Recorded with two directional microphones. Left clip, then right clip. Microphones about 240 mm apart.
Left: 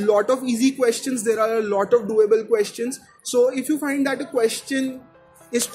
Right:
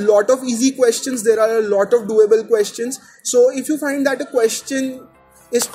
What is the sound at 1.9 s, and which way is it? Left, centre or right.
A man's voice, centre.